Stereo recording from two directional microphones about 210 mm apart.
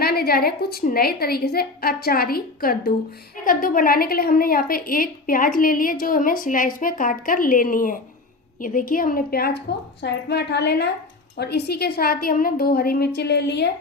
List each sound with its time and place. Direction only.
0.0 s a woman's voice: 50° left (ahead or behind)